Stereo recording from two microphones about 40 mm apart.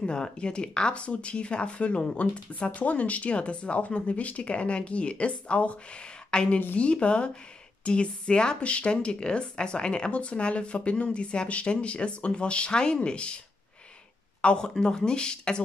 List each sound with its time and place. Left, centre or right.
0.0 s speech: left
14.4 s speech: left